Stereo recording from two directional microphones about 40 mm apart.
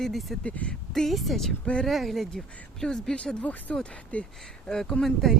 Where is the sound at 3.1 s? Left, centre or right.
Left.